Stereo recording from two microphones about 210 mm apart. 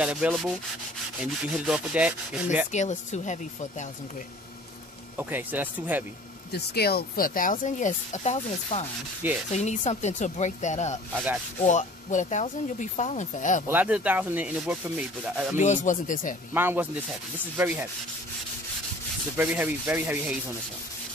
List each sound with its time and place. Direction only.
0.0 s rub: 5° right (ahead or behind)
2.7 s speech: 35° left (ahead or behind)
5.1 s rub: 10° right (ahead or behind)
6.5 s speech: 50° left (ahead or behind)
13.7 s rub: 5° right (ahead or behind)
15.5 s speech: 35° left (ahead or behind)
16.5 s rub: 10° right (ahead or behind)
19.3 s rub: 10° right (ahead or behind)